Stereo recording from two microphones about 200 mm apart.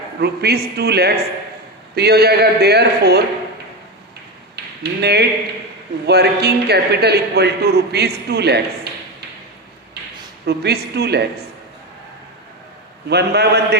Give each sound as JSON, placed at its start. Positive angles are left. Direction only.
{"t": 0.2, "sound": "a man's voice", "side_deg": -55}
{"t": 4.5, "sound": "tap", "side_deg": -55}
{"t": 6.1, "sound": "a man's voice", "side_deg": -55}
{"t": 10.4, "sound": "a man's voice", "side_deg": -55}
{"t": 13.1, "sound": "a man's voice", "side_deg": -55}